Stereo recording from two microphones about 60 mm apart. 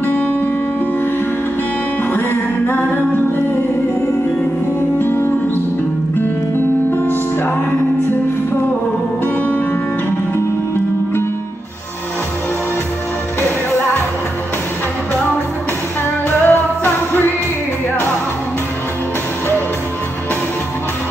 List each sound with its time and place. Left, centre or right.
0.0 s music: left
2.1 s music: left
4.9 s music: left
6.9 s music: left
16.3 s music: left